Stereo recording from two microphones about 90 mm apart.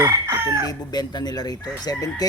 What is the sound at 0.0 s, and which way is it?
Chicken, 35° right (ahead or behind).